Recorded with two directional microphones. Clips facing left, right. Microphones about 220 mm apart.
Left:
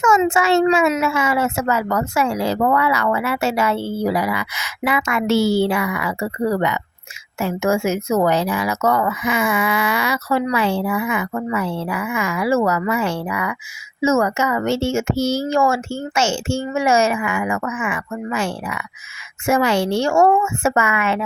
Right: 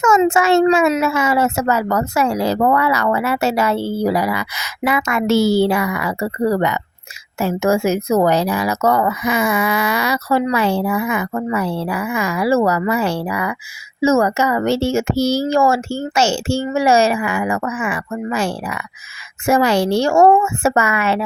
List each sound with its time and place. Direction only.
0.0 s a child's voice: 45° right (ahead or behind)